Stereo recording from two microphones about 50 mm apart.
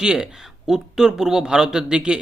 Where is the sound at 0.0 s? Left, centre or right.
Centre.